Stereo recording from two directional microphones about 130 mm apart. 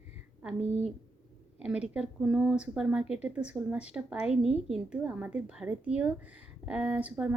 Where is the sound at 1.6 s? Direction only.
10° right (ahead or behind).